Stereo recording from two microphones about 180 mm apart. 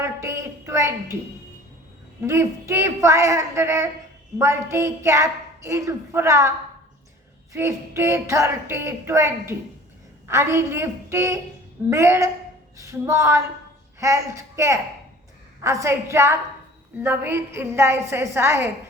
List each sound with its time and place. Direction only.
0.0 s a sound: 15° right (ahead or behind)
2.2 s a woman's voice: 15° right (ahead or behind)
7.5 s a woman's voice: 15° right (ahead or behind)